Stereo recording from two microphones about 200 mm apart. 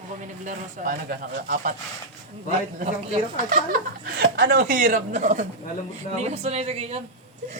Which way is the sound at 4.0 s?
50° right (ahead or behind).